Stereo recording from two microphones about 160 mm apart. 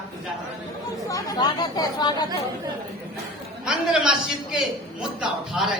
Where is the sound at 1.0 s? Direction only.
25° left (ahead or behind).